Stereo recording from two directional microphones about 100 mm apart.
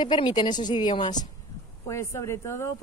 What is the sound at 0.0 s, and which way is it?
Speech, 50° left (ahead or behind).